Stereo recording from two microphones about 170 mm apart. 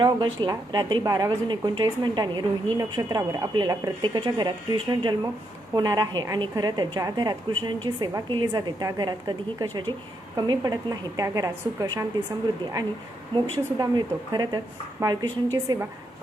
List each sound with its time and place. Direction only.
0.0 s a woman's voice: 25° right (ahead or behind)
13.3 s a woman's voice: 25° right (ahead or behind)